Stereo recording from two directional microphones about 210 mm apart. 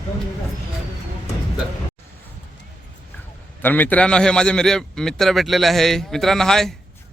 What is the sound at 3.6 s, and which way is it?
A man's voice, 10° left (ahead or behind).